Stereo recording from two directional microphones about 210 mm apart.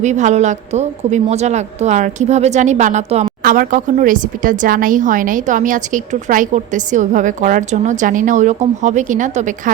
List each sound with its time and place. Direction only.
0.0 s a woman's voice: 35° right (ahead or behind)